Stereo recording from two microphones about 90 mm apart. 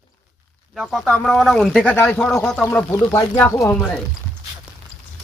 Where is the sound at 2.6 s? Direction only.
25° left (ahead or behind).